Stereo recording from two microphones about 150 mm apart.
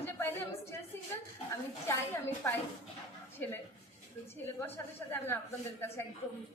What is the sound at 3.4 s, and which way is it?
Speech, 10° left (ahead or behind).